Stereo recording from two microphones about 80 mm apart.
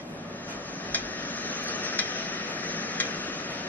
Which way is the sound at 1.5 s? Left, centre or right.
Left.